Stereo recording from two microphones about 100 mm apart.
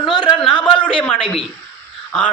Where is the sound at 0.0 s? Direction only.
45° left (ahead or behind).